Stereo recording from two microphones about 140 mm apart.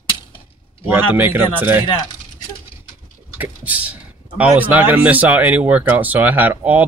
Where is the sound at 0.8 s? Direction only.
15° right (ahead or behind).